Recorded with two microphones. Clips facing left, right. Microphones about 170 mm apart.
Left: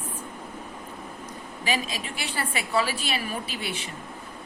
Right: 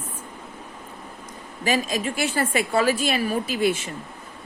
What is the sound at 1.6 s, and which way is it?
A woman's voice, 45° right (ahead or behind).